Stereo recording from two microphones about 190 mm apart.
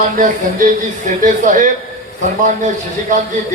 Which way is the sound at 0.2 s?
40° right (ahead or behind).